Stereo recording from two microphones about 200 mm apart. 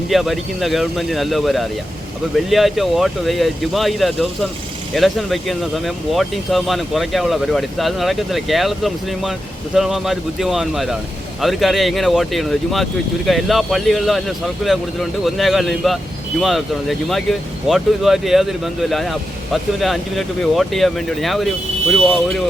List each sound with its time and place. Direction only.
0.1 s speech: centre (ahead or behind)